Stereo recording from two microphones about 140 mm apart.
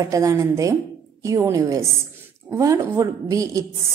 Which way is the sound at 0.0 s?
25° right (ahead or behind).